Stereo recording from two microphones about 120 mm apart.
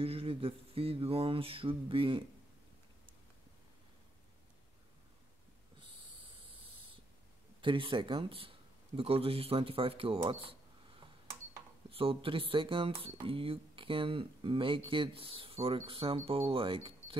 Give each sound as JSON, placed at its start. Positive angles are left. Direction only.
{"t": 0.0, "sound": "speech", "side_deg": -55}
{"t": 7.6, "sound": "speech", "side_deg": -45}
{"t": 11.9, "sound": "speech", "side_deg": -50}